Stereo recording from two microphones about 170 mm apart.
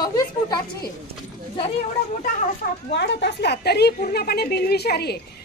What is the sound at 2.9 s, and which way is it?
A woman's voice, 85° left.